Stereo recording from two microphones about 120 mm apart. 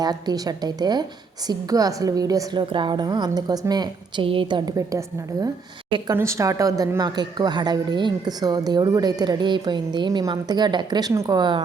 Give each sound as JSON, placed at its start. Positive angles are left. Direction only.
{"t": 0.0, "sound": "a woman's voice", "side_deg": -35}
{"t": 4.9, "sound": "a woman's voice", "side_deg": -25}
{"t": 11.1, "sound": "a woman's voice", "side_deg": -25}
{"t": 11.3, "sound": "a woman's voice", "side_deg": -40}